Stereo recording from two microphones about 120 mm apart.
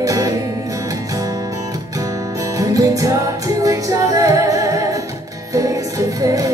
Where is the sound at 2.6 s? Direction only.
30° right (ahead or behind).